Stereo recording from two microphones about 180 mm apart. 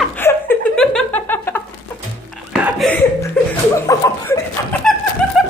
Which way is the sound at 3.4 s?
10° left (ahead or behind).